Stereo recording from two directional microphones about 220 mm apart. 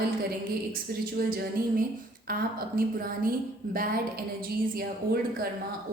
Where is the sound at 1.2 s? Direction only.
45° right (ahead or behind).